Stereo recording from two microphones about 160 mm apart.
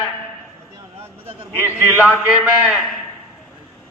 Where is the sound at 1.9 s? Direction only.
10° left (ahead or behind).